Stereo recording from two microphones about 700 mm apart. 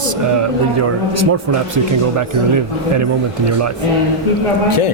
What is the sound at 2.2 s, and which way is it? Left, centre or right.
Speech, right.